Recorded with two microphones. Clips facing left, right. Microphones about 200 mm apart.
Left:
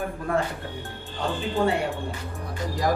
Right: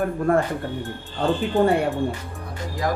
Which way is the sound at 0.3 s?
50° right (ahead or behind).